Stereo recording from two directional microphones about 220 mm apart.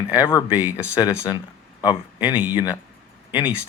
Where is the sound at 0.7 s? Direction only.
15° left (ahead or behind).